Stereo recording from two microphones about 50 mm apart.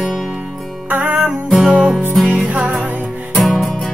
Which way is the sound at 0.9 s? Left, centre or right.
Right.